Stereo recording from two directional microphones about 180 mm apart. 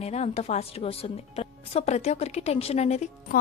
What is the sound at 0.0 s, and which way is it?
A woman's voice, 35° left (ahead or behind).